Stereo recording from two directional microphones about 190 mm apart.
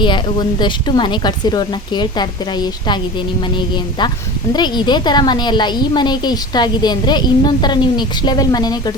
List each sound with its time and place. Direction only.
0.0 s a woman's voice: 25° left (ahead or behind)
4.5 s a woman's voice: 25° left (ahead or behind)